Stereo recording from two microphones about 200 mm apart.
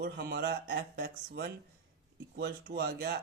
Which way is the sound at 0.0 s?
55° right (ahead or behind).